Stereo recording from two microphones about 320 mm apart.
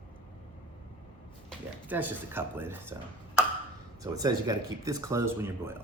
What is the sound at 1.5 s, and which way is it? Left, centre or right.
Speech, centre.